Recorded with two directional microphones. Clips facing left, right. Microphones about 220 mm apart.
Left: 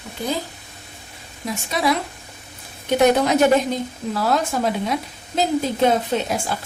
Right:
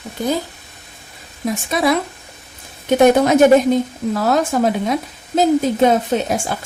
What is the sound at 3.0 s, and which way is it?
Speech, 50° right (ahead or behind).